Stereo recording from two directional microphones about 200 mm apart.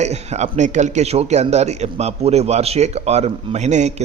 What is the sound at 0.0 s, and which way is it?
A man's voice, 35° right (ahead or behind).